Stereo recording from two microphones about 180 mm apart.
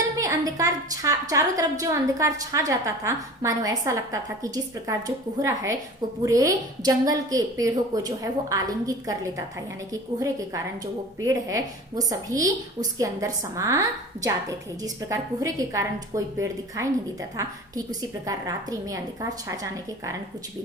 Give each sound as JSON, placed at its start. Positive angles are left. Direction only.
{"t": 0.2, "sound": "a woman's voice", "side_deg": -20}